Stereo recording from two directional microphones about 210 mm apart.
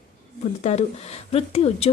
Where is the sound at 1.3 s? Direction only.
30° left (ahead or behind).